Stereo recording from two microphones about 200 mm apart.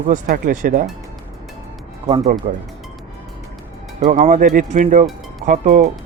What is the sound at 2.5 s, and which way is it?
Speech, 40° right (ahead or behind).